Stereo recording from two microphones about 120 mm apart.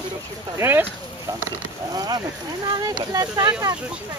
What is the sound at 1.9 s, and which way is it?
Speech, 30° right (ahead or behind).